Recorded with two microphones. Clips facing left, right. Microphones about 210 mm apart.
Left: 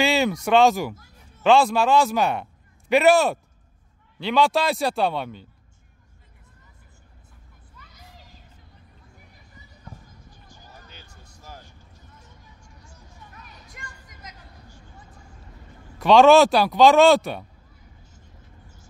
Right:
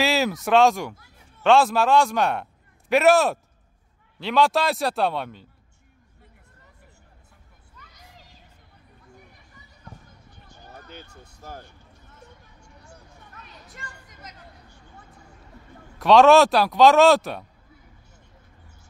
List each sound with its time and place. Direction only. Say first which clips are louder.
0.0 s speech: left 1 dB; centre (ahead or behind)
10.3 s a sound: right 6 dB; 65° right (ahead or behind)
12.2 s vehicle: right 2 dB; 60° right (ahead or behind)
16.0 s speech: left 1 dB; centre (ahead or behind)